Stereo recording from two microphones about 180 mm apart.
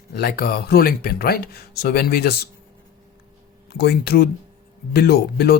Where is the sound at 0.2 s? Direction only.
60° left (ahead or behind).